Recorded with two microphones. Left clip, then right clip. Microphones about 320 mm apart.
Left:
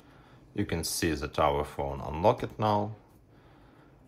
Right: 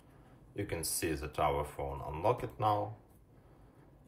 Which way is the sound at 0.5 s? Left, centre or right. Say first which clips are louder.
Left 6 dB; left.